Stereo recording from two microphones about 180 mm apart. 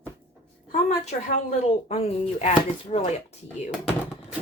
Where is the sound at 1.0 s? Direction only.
40° left (ahead or behind).